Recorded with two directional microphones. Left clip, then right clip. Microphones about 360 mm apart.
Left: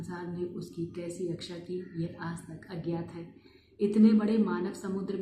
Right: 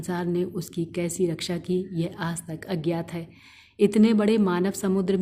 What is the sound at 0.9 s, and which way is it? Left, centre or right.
A woman's voice, right.